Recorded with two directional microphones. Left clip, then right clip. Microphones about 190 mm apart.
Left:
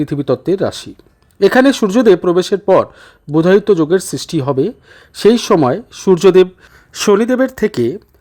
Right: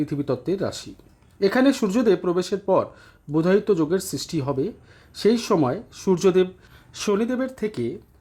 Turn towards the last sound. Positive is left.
turn(degrees=45)  # may be behind; listen again after turning